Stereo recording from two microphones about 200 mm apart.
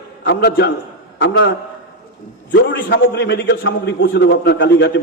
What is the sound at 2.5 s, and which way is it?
A man's voice, 60° left (ahead or behind).